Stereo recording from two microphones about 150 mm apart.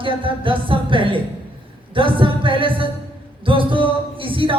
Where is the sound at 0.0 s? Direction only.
35° right (ahead or behind).